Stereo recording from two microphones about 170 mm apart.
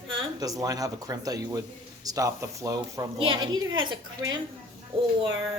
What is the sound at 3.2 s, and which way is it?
Speech, 30° right (ahead or behind).